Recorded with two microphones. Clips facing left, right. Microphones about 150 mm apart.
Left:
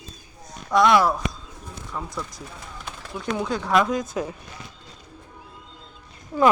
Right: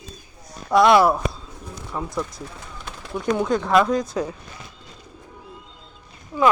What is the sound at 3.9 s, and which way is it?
Speech, 20° left (ahead or behind).